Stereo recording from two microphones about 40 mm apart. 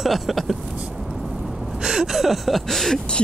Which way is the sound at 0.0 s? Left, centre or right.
Centre.